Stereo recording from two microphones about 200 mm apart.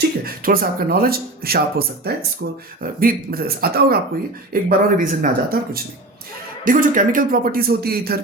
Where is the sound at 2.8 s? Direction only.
45° right (ahead or behind).